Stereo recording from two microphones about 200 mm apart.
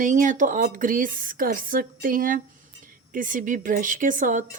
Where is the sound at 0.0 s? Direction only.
40° right (ahead or behind).